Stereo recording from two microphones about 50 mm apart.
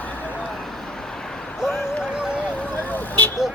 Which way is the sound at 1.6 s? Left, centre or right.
Centre.